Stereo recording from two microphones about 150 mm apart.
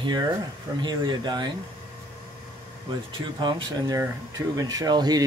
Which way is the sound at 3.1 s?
30° right (ahead or behind).